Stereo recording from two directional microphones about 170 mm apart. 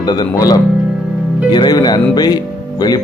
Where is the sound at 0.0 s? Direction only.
25° left (ahead or behind).